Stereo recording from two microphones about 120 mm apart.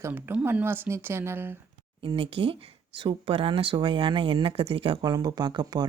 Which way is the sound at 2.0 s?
45° right (ahead or behind).